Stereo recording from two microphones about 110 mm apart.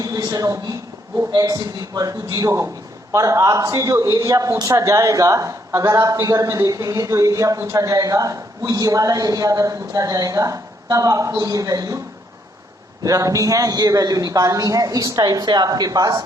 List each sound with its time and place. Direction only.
0.0 s a sound: 35° right (ahead or behind)
1.3 s a man's voice: 35° right (ahead or behind)
13.0 s a man's voice: 30° right (ahead or behind)